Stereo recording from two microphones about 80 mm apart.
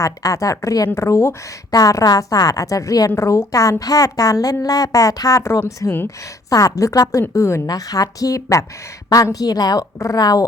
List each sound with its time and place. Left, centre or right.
0.0 s a woman's voice: left
1.7 s a woman's voice: left
7.7 s a woman's voice: left